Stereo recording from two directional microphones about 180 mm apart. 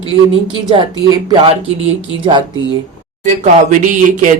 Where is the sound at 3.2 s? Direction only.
40° right (ahead or behind).